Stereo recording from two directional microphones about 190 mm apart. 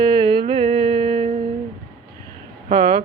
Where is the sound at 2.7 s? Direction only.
30° right (ahead or behind).